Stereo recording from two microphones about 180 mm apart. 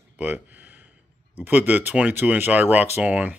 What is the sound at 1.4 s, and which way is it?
Speech, 10° right (ahead or behind).